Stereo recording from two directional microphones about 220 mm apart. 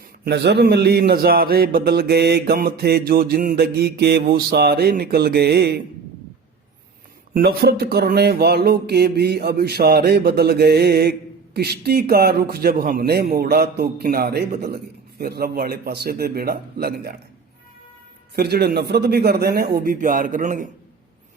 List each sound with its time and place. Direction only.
0.3 s mantra: 50° right (ahead or behind)
7.3 s mantra: 45° right (ahead or behind)
18.3 s mantra: 45° right (ahead or behind)